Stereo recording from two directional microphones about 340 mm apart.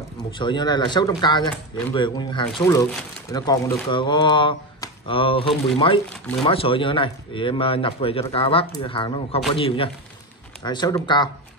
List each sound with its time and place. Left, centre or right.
0.4 s speech: centre